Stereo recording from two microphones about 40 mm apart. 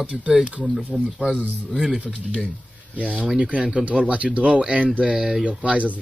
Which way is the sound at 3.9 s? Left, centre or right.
Right.